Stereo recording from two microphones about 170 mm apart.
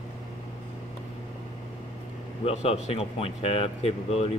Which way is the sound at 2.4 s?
35° left (ahead or behind).